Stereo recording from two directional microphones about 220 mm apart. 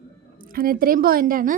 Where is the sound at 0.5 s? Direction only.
40° right (ahead or behind).